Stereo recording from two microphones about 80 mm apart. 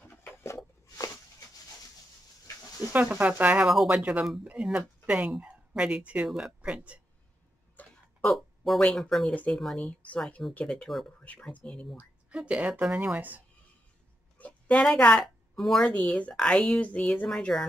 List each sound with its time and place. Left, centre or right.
0.0 s a sound: left
2.9 s speech: right
3.6 s speech: centre
3.9 s speech: centre
7.8 s a sound: left
8.2 s a woman's voice: centre
10.9 s speech: centre
11.5 s a woman's voice: centre
12.4 s speech: centre
14.4 s a sound: centre
14.9 s a woman's voice: centre
15.9 s a woman's voice: centre